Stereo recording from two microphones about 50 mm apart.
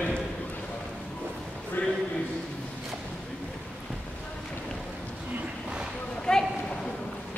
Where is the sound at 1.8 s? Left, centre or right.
Left.